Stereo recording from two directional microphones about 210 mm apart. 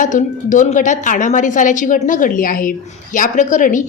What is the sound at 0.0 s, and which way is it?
A woman's voice, 35° left (ahead or behind).